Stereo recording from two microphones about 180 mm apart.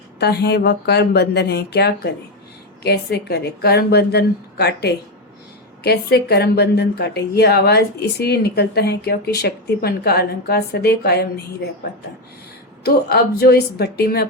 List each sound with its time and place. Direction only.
0.2 s a woman's voice: 65° left (ahead or behind)
12.8 s a woman's voice: 65° left (ahead or behind)